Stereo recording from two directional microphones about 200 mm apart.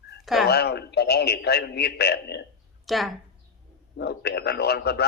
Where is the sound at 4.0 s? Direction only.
55° left (ahead or behind).